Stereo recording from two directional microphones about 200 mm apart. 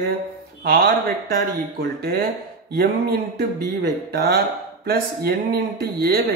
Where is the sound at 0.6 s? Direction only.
45° right (ahead or behind).